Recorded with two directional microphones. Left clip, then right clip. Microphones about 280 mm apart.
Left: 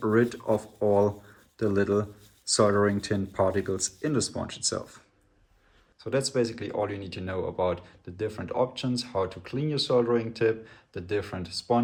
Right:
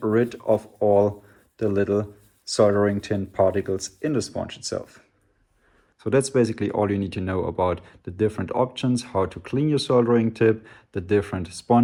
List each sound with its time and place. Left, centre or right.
0.0 s speech: centre
6.0 s speech: right